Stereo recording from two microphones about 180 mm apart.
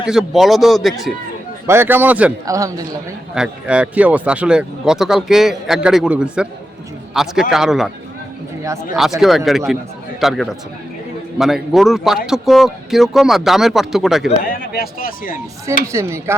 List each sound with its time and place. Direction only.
0.0 s speech: 5° right (ahead or behind)
1.6 s a man's voice: 15° right (ahead or behind)
2.6 s a man's voice: 20° right (ahead or behind)
3.3 s speech: 5° right (ahead or behind)
9.0 s speech: centre (ahead or behind)
14.6 s speech: 55° left (ahead or behind)
15.6 s a man's voice: 15° right (ahead or behind)